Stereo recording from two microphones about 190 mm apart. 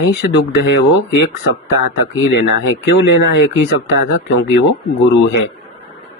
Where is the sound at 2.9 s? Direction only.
60° left (ahead or behind).